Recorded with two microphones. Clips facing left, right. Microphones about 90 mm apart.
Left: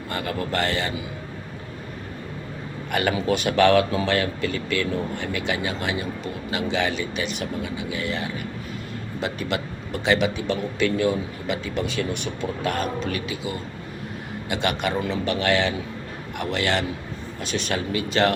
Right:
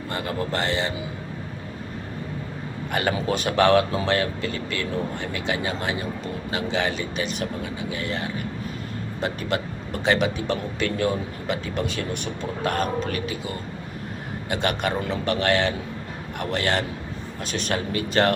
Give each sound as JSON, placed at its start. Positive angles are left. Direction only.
{"t": 0.1, "sound": "a man's voice", "side_deg": -30}
{"t": 2.9, "sound": "a man's voice", "side_deg": -30}